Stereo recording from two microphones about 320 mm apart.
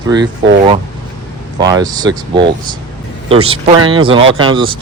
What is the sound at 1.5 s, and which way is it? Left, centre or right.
Speech, centre.